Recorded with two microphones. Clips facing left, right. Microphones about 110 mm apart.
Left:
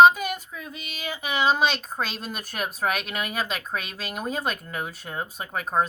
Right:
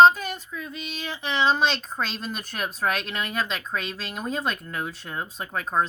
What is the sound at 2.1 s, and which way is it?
Speech, 50° left (ahead or behind).